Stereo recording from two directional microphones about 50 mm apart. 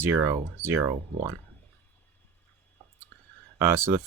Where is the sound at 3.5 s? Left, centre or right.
Right.